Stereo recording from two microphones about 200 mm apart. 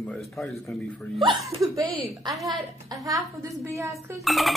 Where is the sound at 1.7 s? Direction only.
15° right (ahead or behind).